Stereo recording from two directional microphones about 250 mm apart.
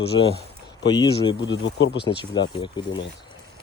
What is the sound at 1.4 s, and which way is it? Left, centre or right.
Speech, left.